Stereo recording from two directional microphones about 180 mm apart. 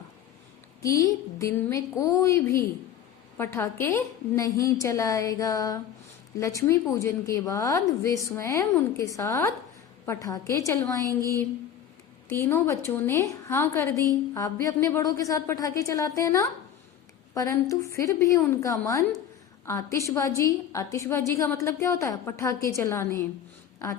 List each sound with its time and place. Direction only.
0.8 s a woman's voice: 20° left (ahead or behind)
12.3 s a woman's voice: 15° left (ahead or behind)